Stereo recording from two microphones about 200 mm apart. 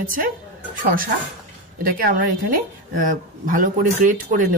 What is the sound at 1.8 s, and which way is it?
Speech, 45° right (ahead or behind).